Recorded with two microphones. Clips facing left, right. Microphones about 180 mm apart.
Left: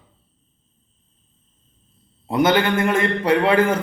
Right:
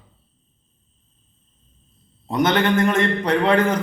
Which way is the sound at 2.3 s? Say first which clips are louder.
Left 1 dB; 5° left (ahead or behind).